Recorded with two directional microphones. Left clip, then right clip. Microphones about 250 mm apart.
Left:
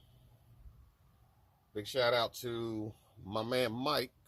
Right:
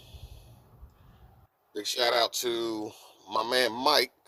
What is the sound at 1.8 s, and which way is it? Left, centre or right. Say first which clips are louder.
Speech: right 5 dB; right.